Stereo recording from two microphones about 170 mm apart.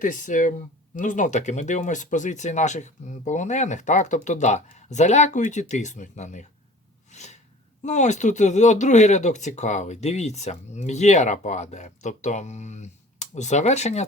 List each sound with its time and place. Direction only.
0.0 s speech: 50° left (ahead or behind)
7.1 s snort: 45° left (ahead or behind)
7.9 s speech: 45° left (ahead or behind)